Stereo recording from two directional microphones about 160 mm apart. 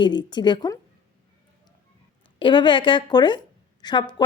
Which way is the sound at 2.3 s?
30° left (ahead or behind).